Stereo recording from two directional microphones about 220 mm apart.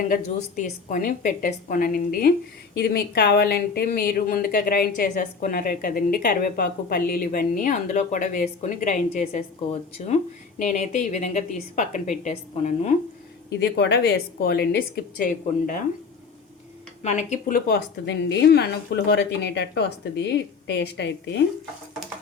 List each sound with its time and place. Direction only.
0.1 s a woman's voice: 35° left (ahead or behind)
13.5 s a woman's voice: 50° left (ahead or behind)
17.0 s a woman's voice: 30° left (ahead or behind); by 21.4 s 50° left (ahead or behind)